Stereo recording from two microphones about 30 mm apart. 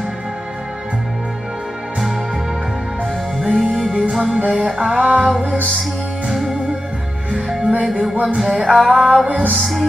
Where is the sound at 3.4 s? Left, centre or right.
Centre.